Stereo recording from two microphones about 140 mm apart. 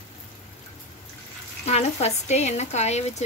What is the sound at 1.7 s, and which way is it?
Speech, 50° left (ahead or behind).